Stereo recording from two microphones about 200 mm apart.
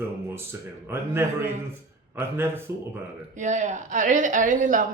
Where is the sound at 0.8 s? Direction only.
10° right (ahead or behind).